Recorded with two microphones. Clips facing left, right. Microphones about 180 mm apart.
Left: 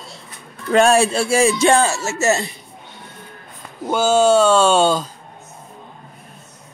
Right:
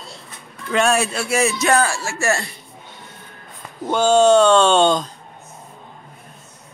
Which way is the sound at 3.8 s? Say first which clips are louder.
Right 1 dB; 5° left (ahead or behind).